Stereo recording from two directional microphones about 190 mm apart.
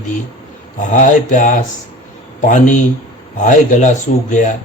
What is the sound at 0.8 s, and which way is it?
Speech, 40° left (ahead or behind).